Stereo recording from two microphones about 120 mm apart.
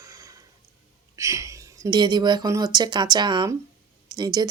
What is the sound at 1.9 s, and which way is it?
Speech, 40° right (ahead or behind).